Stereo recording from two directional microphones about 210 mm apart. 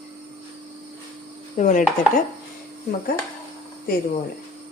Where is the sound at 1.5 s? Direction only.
40° left (ahead or behind).